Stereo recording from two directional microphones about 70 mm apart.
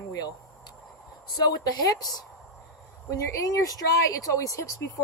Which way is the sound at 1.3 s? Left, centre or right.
Left.